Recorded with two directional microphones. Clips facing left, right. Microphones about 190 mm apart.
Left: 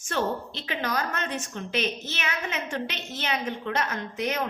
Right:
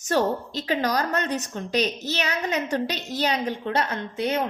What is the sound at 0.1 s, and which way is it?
A woman's voice, 40° right (ahead or behind).